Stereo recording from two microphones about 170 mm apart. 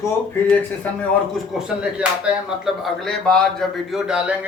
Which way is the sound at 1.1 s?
Centre (ahead or behind).